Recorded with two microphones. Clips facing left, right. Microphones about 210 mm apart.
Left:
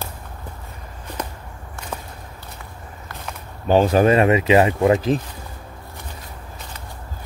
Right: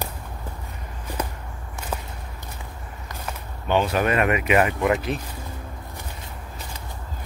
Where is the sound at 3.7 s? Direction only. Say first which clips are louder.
Left 7 dB; 35° left (ahead or behind).